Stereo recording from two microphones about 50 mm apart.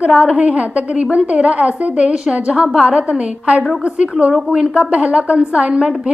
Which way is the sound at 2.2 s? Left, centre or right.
Centre.